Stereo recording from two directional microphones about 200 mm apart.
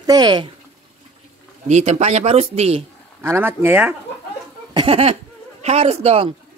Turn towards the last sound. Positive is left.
turn(degrees=-30)  # may be behind; listen again after turning